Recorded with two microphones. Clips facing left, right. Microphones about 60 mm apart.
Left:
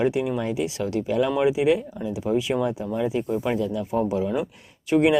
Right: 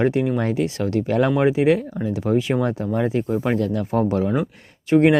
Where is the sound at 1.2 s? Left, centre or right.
Right.